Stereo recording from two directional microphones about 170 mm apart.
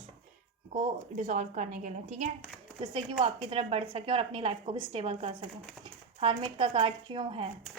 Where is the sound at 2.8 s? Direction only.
30° right (ahead or behind).